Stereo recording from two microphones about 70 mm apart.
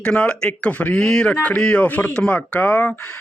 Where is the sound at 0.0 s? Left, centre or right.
Centre.